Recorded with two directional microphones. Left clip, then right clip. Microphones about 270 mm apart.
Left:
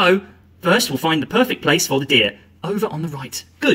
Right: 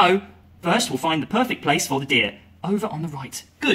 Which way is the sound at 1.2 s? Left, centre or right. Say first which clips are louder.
Left 4 dB; centre.